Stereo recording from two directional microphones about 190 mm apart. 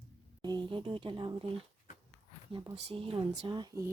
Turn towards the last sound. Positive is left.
turn(degrees=-20)  # may be behind; listen again after turning